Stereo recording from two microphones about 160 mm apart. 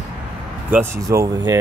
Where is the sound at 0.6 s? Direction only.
15° right (ahead or behind).